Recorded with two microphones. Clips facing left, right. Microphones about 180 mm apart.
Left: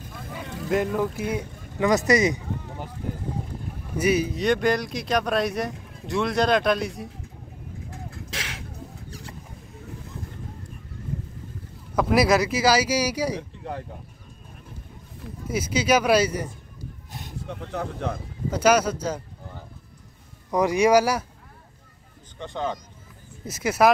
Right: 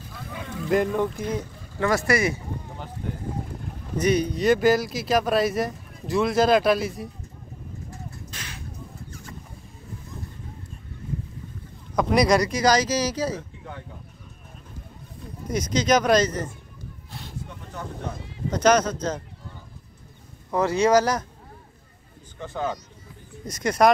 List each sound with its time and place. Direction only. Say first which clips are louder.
0.3 s boat: right 2 dB; centre (ahead or behind); by 2.9 s 15° left (ahead or behind)
3.9 s speech: even; 5° left (ahead or behind)
8.3 s a sound: left 4 dB; 90° left
11.9 s speech: even; 5° left (ahead or behind)
13.4 s a sound: left 5 dB; 40° left (ahead or behind)
15.4 s speech: right 1 dB; 5° left (ahead or behind)
17.5 s a sound: left 10 dB; 70° left (ahead or behind)
18.5 s speech: even; 10° left (ahead or behind)
20.5 s speech: left 1 dB; 15° left (ahead or behind)
22.4 s speech: even; 5° right (ahead or behind)